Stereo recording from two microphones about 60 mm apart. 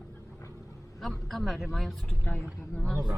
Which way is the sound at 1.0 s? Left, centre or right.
Centre.